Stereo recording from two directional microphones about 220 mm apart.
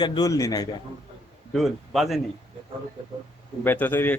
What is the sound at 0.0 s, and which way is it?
Speech, 20° left (ahead or behind).